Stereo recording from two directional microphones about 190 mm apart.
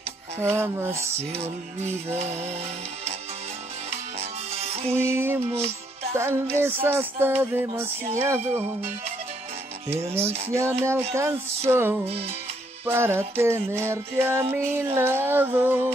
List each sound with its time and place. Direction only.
0.4 s music: 15° right (ahead or behind)
1.3 s music: 35° right (ahead or behind)
4.2 s music: 35° right (ahead or behind)
4.9 s music: 15° right (ahead or behind)
10.5 s music: 15° right (ahead or behind)